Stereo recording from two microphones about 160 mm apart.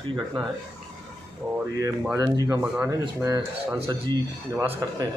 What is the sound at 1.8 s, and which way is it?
Speech, 20° right (ahead or behind).